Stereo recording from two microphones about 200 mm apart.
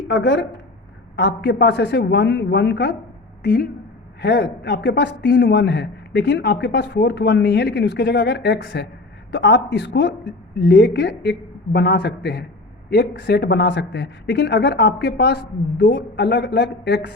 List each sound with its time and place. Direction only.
0.1 s a man's voice: 65° left (ahead or behind)